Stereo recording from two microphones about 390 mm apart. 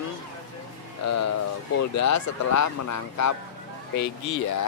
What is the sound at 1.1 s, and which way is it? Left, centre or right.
Speech, left.